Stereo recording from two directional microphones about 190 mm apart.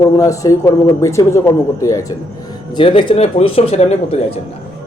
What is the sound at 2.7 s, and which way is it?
Speech, 25° left (ahead or behind).